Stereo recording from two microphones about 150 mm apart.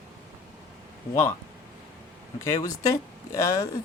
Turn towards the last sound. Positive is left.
turn(degrees=20)  # may be behind; listen again after turning